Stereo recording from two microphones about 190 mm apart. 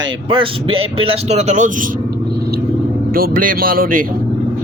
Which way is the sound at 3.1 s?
50° right (ahead or behind).